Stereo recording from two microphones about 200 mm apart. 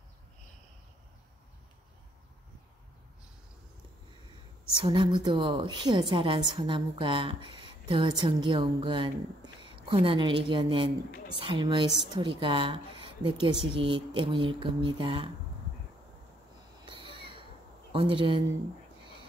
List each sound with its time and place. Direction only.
4.7 s a woman's voice: 25° right (ahead or behind)
17.2 s crow: 25° right (ahead or behind)
17.9 s a woman's voice: 25° right (ahead or behind)